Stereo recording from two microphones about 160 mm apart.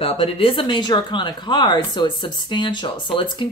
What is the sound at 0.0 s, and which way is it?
Speech, 35° left (ahead or behind).